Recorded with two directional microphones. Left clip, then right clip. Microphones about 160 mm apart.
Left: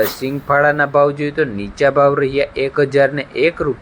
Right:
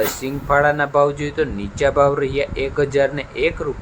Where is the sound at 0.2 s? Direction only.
15° left (ahead or behind).